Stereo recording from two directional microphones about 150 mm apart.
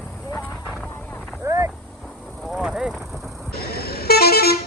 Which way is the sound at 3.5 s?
90° left.